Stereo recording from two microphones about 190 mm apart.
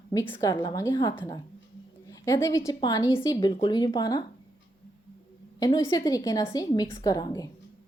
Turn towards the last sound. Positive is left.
turn(degrees=20)  # may be behind; listen again after turning